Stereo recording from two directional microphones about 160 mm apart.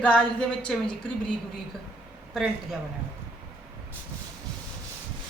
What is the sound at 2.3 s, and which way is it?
Speech, centre (ahead or behind).